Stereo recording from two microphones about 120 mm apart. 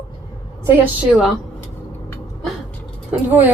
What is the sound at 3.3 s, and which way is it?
Speech, 15° right (ahead or behind).